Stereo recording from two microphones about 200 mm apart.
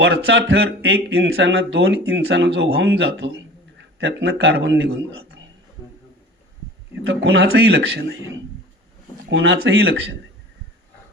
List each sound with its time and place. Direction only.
0.0 s speech: 70° right (ahead or behind)
7.0 s speech: 80° right; by 8.4 s 60° right (ahead or behind)
9.3 s speech: 75° right (ahead or behind)
9.6 s speech: 65° right (ahead or behind)